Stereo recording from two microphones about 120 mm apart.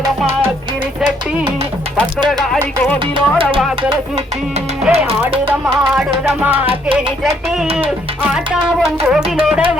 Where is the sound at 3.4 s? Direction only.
45° right (ahead or behind).